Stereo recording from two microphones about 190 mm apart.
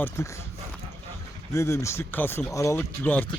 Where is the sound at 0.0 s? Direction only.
15° left (ahead or behind).